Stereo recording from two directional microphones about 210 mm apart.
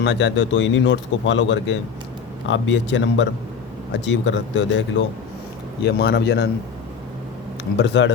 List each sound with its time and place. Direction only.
0.0 s speech: 60° left (ahead or behind)
7.8 s speech: 60° left (ahead or behind)